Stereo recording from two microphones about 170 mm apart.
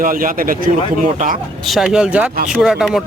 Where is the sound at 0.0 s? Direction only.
55° right (ahead or behind).